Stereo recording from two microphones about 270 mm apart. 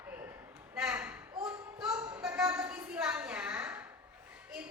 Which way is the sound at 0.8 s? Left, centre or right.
Centre.